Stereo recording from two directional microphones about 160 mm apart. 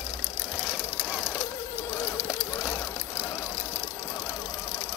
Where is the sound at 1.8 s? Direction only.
20° left (ahead or behind).